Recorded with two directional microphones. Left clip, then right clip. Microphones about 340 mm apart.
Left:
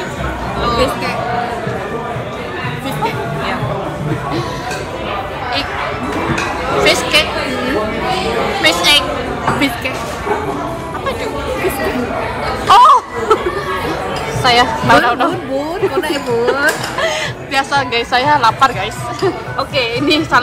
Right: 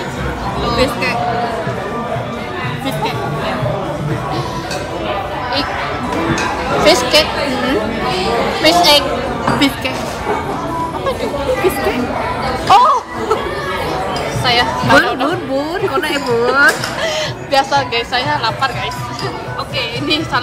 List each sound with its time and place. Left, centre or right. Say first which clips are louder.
6.8 s chatter: right 1 dB; centre
8.6 s a woman's voice: right 2 dB; centre
12.6 s chatter: left 3 dB; centre
14.4 s speech: left 3 dB; centre
19.8 s speech: left 3 dB; centre